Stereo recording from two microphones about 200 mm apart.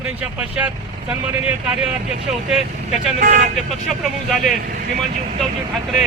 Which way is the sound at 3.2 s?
40° right (ahead or behind).